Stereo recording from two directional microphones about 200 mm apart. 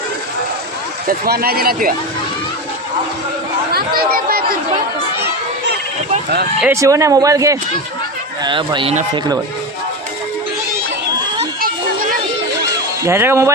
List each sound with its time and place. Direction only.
1.0 s speech: 45° right (ahead or behind)
3.7 s speech: 50° right (ahead or behind)
6.6 s speech: 10° right (ahead or behind)
13.0 s speech: 15° right (ahead or behind)